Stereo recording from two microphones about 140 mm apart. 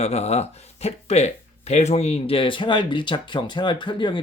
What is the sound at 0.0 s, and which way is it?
Speech, 50° left (ahead or behind).